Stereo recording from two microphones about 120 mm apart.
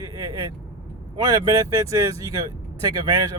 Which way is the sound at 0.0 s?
30° right (ahead or behind).